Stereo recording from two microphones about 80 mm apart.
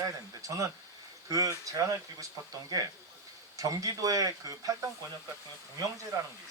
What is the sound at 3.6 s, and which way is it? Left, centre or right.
Speech, right.